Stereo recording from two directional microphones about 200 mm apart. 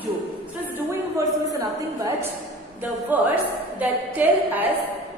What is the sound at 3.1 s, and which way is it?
A woman's voice, 10° right (ahead or behind).